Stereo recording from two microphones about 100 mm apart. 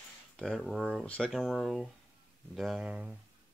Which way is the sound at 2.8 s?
10° right (ahead or behind).